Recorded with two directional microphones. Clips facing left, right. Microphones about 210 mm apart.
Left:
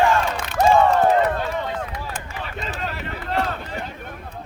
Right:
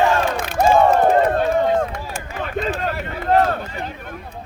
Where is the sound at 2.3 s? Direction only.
50° right (ahead or behind).